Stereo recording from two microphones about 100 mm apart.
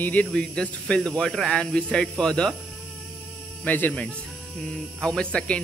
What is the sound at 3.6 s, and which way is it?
Speech, 20° left (ahead or behind).